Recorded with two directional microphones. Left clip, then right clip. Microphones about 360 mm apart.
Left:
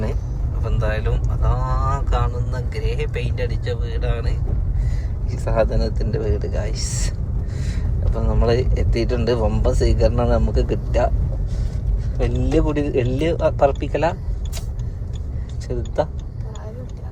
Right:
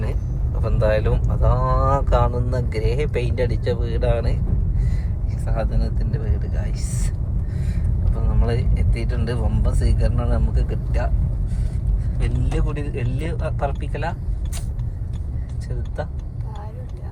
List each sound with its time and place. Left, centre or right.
0.6 s speech: centre
5.3 s speech: left
8.4 s speech: left
12.5 s speech: centre